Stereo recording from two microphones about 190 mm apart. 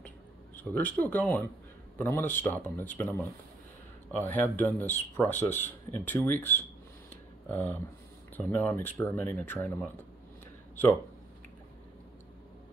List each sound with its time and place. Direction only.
0.7 s speech: 10° left (ahead or behind)